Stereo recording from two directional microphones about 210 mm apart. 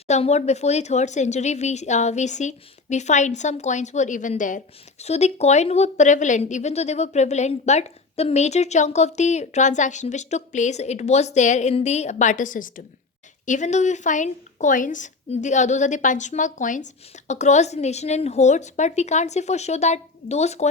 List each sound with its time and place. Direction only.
0.1 s speech: 30° left (ahead or behind)